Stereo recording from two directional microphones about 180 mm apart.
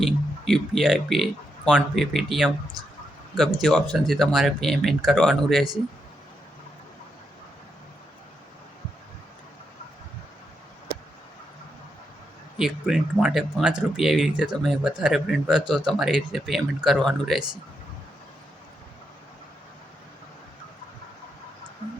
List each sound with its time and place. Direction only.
0.0 s speech: centre (ahead or behind)
12.5 s speech: centre (ahead or behind)